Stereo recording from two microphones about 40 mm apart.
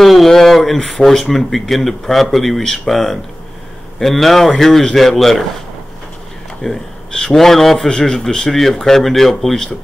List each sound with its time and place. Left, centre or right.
0.0 s a man's voice: centre
6.6 s speech: centre
7.1 s a sound: centre
7.3 s speech: centre
8.1 s speech: centre
8.5 s a man's voice: centre